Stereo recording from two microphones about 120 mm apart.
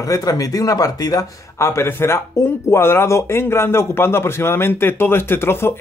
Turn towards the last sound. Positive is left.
turn(degrees=20)  # may be behind; listen again after turning